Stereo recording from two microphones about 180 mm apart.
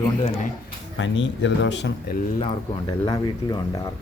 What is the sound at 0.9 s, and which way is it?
Speech, 90° left.